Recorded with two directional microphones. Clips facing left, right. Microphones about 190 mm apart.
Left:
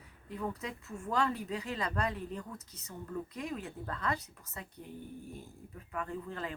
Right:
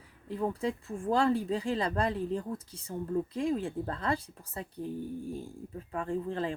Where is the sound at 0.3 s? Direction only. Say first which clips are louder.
Right 7 dB; 30° right (ahead or behind).